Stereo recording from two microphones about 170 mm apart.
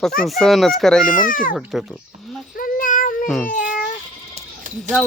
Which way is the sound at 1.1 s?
55° left (ahead or behind).